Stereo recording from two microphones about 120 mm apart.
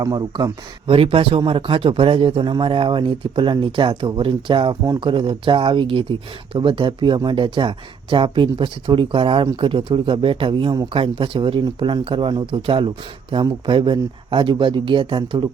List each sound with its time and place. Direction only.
0.0 s speech: 30° right (ahead or behind)
0.9 s speech: 50° right (ahead or behind)